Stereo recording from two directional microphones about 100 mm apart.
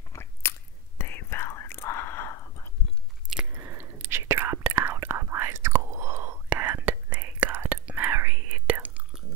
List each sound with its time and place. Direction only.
0.1 s whispering: 25° left (ahead or behind)
3.5 s whispering: 25° right (ahead or behind)